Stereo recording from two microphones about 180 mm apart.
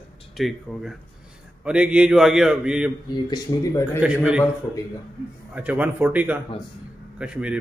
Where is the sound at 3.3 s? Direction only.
15° left (ahead or behind).